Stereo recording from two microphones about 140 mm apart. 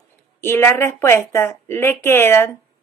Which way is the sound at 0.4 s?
15° left (ahead or behind).